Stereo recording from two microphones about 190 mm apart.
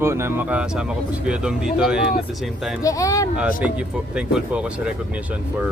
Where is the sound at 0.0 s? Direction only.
15° right (ahead or behind).